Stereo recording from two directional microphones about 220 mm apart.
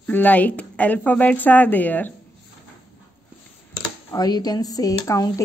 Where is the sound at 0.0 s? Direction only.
5° left (ahead or behind).